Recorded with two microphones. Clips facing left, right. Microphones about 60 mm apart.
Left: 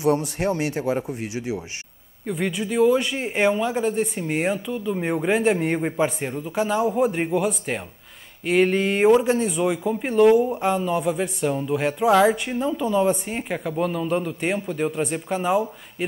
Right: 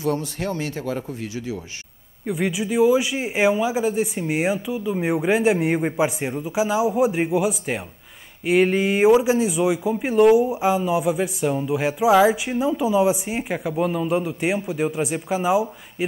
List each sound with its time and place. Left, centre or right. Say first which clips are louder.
0.0 s speech: left 3 dB; left
2.2 s speech: right 2 dB; centre